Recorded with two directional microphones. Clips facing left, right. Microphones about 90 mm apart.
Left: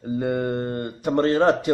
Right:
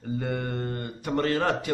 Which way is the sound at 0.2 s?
20° left (ahead or behind).